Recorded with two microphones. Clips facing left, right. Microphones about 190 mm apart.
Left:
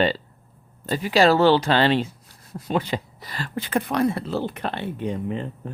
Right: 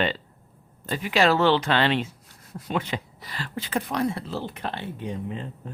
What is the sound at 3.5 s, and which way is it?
Speech, 55° left (ahead or behind).